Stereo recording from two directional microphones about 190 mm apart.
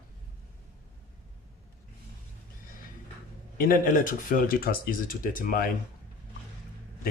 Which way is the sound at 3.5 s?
50° left (ahead or behind).